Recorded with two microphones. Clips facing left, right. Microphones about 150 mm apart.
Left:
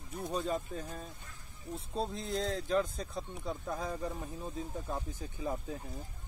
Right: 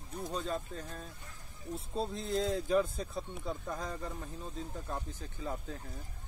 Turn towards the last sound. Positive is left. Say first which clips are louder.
# left 3 dB
turn(degrees=10)  # may be behind; listen again after turning